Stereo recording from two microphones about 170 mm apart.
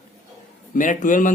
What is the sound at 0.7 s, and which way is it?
Speech, 50° left (ahead or behind).